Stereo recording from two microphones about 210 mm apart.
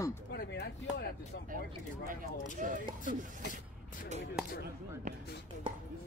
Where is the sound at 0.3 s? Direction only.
50° left (ahead or behind).